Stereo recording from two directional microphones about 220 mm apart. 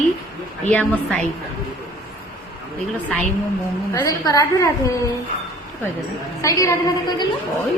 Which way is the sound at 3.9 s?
15° left (ahead or behind).